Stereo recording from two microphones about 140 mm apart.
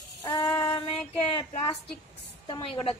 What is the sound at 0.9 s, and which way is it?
Speech, 40° left (ahead or behind).